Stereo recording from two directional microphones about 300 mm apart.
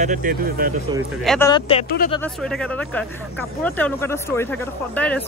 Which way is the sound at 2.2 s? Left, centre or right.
Centre.